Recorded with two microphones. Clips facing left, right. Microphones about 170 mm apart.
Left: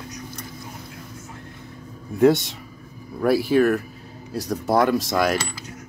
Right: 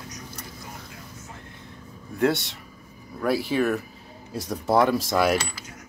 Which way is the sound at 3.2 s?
5° left (ahead or behind).